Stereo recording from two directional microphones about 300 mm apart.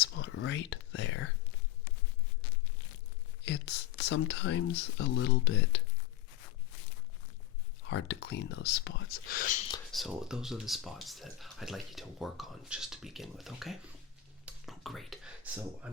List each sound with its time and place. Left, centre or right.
0.0 s whispering: left
3.4 s speech: left
7.9 s speech: left
9.9 s speech: centre